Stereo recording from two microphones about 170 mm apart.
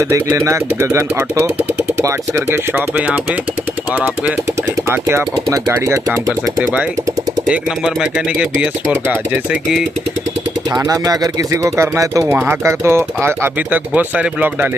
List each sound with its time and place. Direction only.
0.0 s speech: 15° right (ahead or behind)
4.9 s speech: 15° right (ahead or behind)
7.4 s speech: 5° right (ahead or behind)
10.7 s speech: 20° right (ahead or behind)